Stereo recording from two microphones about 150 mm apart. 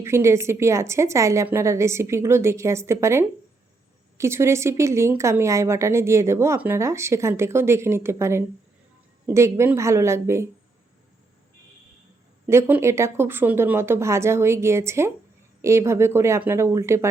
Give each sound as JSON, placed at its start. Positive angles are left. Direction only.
{"t": 0.0, "sound": "a woman's voice", "side_deg": -20}
{"t": 12.5, "sound": "speech", "side_deg": -15}